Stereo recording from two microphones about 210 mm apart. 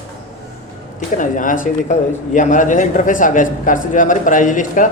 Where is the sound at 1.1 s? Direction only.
40° left (ahead or behind).